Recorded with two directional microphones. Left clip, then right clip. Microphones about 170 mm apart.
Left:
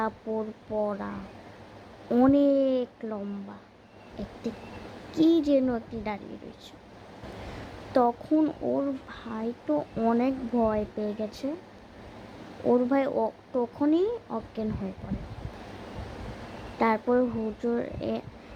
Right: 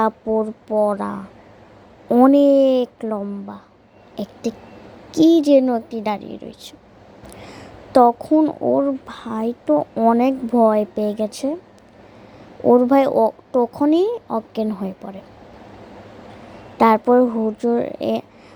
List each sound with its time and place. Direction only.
0.0 s speech: 30° right (ahead or behind)
2.3 s speech: 30° right (ahead or behind)
7.9 s speech: 30° right (ahead or behind)
12.6 s speech: 30° right (ahead or behind)
16.7 s speech: 30° right (ahead or behind)